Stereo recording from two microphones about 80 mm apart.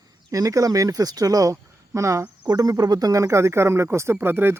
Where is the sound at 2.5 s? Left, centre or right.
Right.